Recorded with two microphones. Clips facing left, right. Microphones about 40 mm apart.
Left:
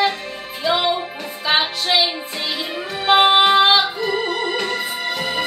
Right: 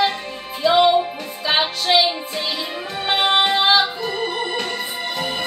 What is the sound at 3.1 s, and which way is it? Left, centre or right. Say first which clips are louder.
Music: left 5 dB; left.